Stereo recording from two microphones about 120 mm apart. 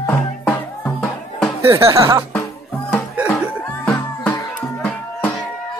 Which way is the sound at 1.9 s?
20° right (ahead or behind).